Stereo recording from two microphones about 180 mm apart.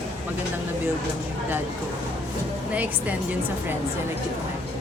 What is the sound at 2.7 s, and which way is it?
Speech, 10° right (ahead or behind).